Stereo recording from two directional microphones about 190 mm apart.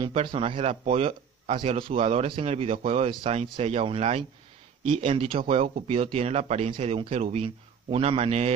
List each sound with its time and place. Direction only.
0.0 s speech: 25° right (ahead or behind)